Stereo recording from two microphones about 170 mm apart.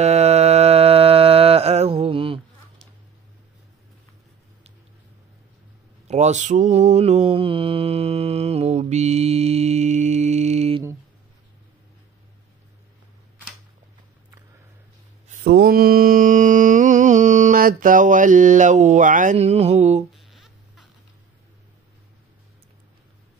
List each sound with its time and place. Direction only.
0.0 s mantra: 40° right (ahead or behind)
6.0 s mantra: 40° right (ahead or behind)
15.4 s mantra: 70° right (ahead or behind); by 20.1 s 40° right (ahead or behind)
20.2 s a sound: centre (ahead or behind)